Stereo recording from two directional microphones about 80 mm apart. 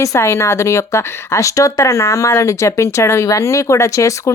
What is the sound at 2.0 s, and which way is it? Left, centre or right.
Speech, left.